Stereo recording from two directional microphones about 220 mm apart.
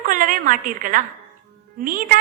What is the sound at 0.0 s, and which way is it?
A woman's voice, 40° right (ahead or behind).